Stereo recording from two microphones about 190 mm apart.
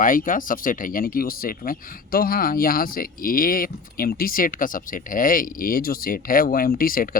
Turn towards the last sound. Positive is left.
turn(degrees=50)  # may be behind; listen again after turning